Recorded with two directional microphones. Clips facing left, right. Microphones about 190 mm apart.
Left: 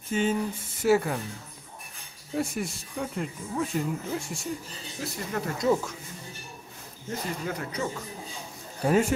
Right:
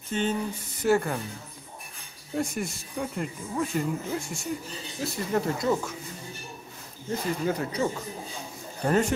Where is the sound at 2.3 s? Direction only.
Centre (ahead or behind).